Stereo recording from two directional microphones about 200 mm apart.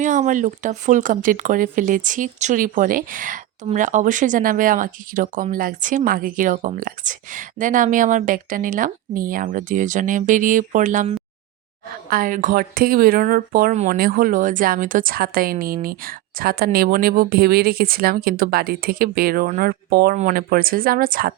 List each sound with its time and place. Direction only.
0.0 s speech: 40° right (ahead or behind)